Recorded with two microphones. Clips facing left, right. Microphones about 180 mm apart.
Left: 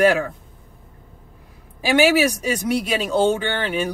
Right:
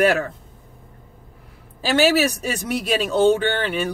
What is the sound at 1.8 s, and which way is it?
Speech, 15° left (ahead or behind).